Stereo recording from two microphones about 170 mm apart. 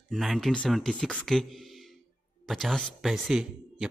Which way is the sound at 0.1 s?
Centre (ahead or behind).